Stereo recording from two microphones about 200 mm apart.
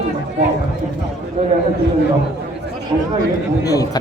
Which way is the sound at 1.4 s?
35° right (ahead or behind).